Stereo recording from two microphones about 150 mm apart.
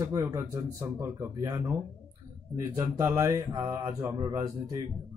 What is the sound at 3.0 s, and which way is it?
Speech, 15° right (ahead or behind).